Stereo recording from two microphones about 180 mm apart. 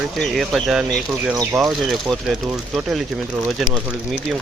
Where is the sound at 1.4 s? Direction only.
15° right (ahead or behind).